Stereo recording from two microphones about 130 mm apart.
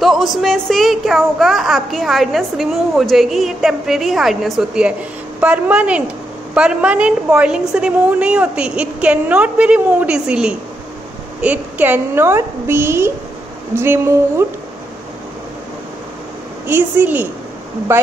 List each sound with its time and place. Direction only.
0.0 s a woman's voice: centre (ahead or behind); by 14.1 s 20° right (ahead or behind)
16.6 s a woman's voice: 15° right (ahead or behind)